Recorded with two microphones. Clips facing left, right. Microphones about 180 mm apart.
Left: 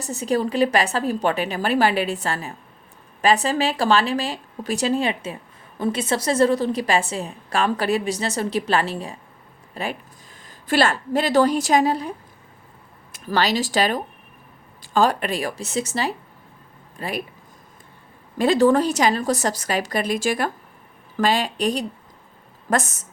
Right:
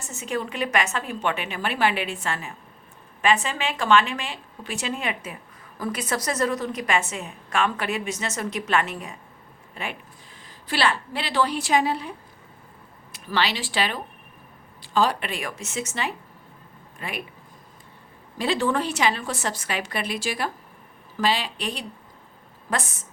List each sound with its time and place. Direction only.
0.0 s a woman's voice: 35° left (ahead or behind)
13.1 s speech: 45° left (ahead or behind)
18.3 s a woman's voice: 45° left (ahead or behind)